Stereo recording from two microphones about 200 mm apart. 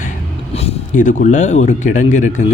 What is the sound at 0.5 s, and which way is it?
Speech, 30° left (ahead or behind).